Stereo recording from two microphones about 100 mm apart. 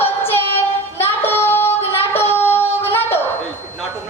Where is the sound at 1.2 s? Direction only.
20° left (ahead or behind).